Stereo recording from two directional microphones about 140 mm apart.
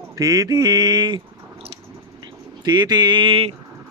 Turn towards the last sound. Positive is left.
turn(degrees=-40)  # may be behind; listen again after turning